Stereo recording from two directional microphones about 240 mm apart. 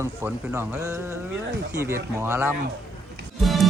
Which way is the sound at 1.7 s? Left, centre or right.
Centre.